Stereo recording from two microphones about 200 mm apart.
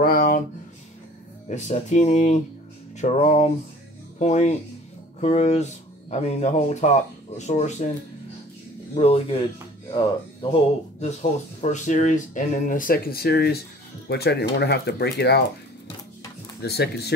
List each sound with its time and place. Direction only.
0.0 s a sound: 45° left (ahead or behind)
1.5 s speech: 35° left (ahead or behind)
8.9 s speech: 30° left (ahead or behind)
10.5 s speech: 35° left (ahead or behind); by 15.4 s 55° left (ahead or behind)
16.6 s speech: 55° left (ahead or behind)